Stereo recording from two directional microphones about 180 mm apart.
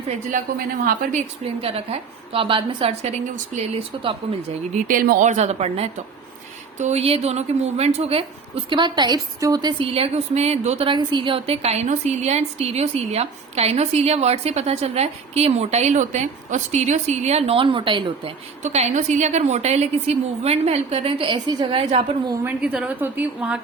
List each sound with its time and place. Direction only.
1.0 s a woman's voice: 50° right (ahead or behind)
1.6 s a woman's voice: 30° right (ahead or behind)
4.9 s a woman's voice: 50° right (ahead or behind); by 22.0 s 30° right (ahead or behind)
22.3 s a woman's voice: 10° right (ahead or behind)